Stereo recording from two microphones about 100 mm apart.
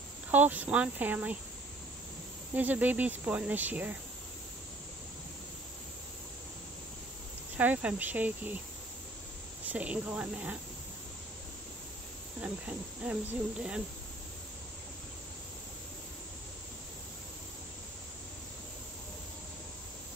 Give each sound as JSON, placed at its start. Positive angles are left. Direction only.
{"t": 0.3, "sound": "cricket", "side_deg": -15}
{"t": 2.5, "sound": "cricket", "side_deg": -15}
{"t": 7.5, "sound": "cricket", "side_deg": -15}
{"t": 9.7, "sound": "cricket", "side_deg": -15}
{"t": 12.4, "sound": "cricket", "side_deg": -15}